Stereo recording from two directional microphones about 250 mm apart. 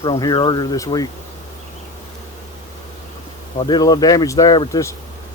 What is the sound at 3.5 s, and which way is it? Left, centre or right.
Speech, centre.